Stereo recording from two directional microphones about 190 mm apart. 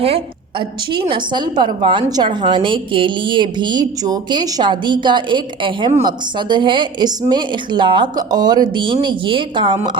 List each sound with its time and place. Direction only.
0.9 s a woman's voice: 25° right (ahead or behind)